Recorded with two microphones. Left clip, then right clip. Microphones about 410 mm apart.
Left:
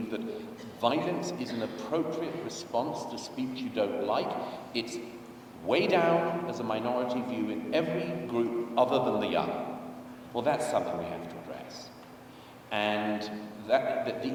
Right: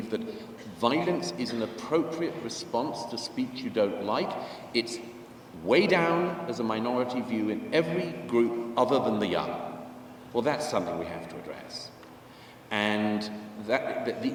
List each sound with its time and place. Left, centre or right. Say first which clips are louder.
0.1 s a sound: right 6 dB; right
0.8 s a man's voice: right 2 dB; right
12.7 s a man's voice: right 1 dB; right